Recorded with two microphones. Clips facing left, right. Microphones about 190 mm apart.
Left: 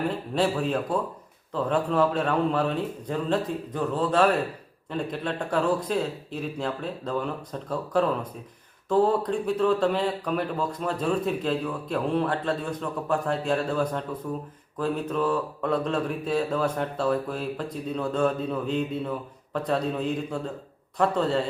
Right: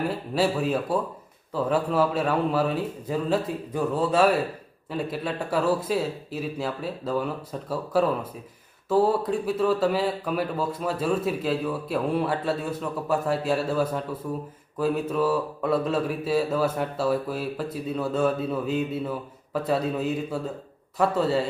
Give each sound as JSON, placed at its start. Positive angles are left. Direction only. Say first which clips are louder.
{"t": 0.1, "sound": "a man's voice", "louder": "right 1 dB", "side_deg": -5}